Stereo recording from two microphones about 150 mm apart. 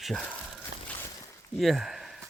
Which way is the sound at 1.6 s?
Centre (ahead or behind).